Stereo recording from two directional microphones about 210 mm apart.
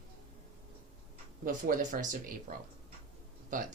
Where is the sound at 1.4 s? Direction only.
40° right (ahead or behind).